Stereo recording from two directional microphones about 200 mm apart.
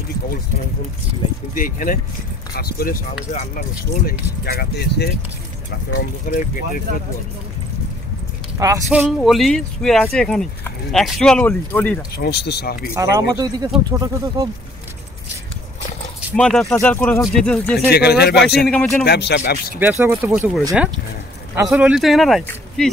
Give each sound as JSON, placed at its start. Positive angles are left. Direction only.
{"t": 1.5, "sound": "speech", "side_deg": 45}
{"t": 3.3, "sound": "speech", "side_deg": 35}
{"t": 4.0, "sound": "speech", "side_deg": 50}
{"t": 6.3, "sound": "speech", "side_deg": 45}
{"t": 8.5, "sound": "speech", "side_deg": -15}
{"t": 8.9, "sound": "speech", "side_deg": -5}
{"t": 12.2, "sound": "speech", "side_deg": 55}
{"t": 12.9, "sound": "speech", "side_deg": -15}
{"t": 16.3, "sound": "speech", "side_deg": 5}
{"t": 17.9, "sound": "speech", "side_deg": 55}
{"t": 18.6, "sound": "speech", "side_deg": 0}
{"t": 19.0, "sound": "speech", "side_deg": 55}
{"t": 19.8, "sound": "speech", "side_deg": -10}
{"t": 21.6, "sound": "speech", "side_deg": -5}